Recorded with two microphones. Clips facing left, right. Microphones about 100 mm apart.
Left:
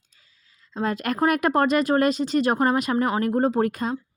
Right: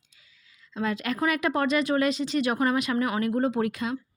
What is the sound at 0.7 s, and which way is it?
Speech, 40° left (ahead or behind).